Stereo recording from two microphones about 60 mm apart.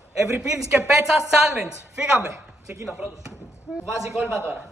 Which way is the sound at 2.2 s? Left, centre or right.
Right.